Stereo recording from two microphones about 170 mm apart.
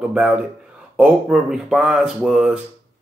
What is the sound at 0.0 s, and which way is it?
Speech, 5° right (ahead or behind).